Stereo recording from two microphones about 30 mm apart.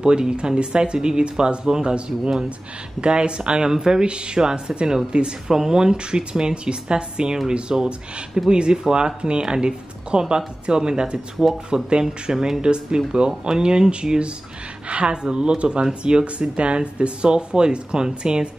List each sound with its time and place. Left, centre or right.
0.0 s speech: right
4.0 s speech: right
4.4 s speech: right
5.1 s speech: right
5.5 s speech: centre
11.4 s speech: centre
11.7 s speech: right
12.6 s speech: right